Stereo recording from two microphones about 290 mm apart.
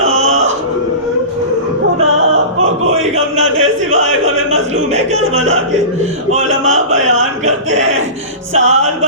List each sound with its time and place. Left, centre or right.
0.0 s music: right
3.0 s a sound: right
5.1 s a man's voice: right